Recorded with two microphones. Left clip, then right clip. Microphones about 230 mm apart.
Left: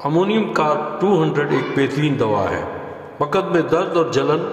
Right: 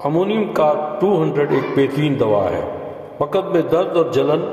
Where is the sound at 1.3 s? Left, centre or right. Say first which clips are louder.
Right 2 dB; centre.